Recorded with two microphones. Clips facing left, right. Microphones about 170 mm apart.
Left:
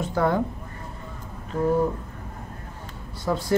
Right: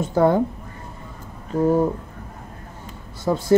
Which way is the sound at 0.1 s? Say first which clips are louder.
Right 6 dB; 25° right (ahead or behind).